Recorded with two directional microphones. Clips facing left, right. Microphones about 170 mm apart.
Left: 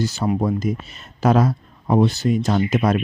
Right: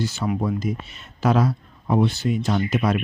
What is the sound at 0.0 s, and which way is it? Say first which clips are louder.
Speech: left 3 dB; 40° left (ahead or behind).